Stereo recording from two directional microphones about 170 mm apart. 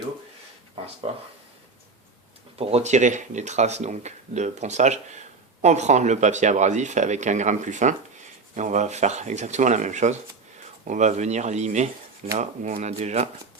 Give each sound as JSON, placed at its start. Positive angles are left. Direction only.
{"t": 2.6, "sound": "speech", "side_deg": -35}